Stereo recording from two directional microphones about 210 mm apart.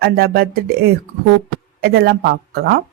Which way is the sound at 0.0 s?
45° right (ahead or behind).